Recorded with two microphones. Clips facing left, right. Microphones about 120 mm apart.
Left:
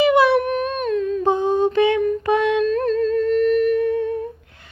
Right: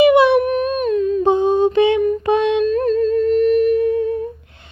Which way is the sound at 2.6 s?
5° right (ahead or behind).